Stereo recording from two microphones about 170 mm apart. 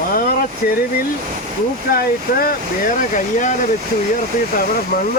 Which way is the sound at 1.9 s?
65° left (ahead or behind).